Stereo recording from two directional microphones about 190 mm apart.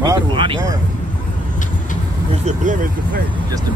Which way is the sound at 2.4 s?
40° right (ahead or behind).